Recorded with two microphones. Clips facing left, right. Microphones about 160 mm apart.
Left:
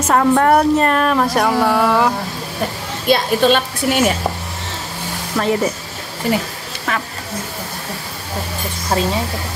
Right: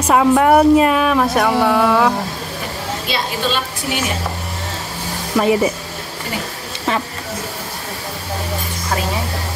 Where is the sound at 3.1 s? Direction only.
55° left (ahead or behind).